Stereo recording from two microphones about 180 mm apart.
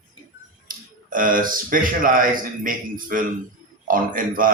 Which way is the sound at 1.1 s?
50° right (ahead or behind).